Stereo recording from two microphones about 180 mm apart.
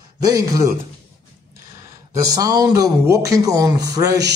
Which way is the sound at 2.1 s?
20° right (ahead or behind).